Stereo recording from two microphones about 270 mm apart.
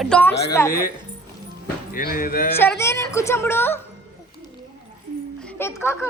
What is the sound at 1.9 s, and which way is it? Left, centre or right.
Speech, left.